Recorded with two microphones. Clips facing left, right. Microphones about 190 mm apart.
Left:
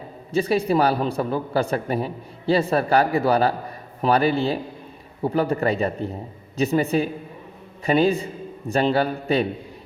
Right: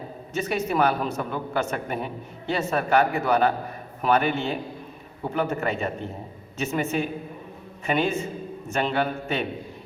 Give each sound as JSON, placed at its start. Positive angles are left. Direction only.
{"t": 0.3, "sound": "speech", "side_deg": 35}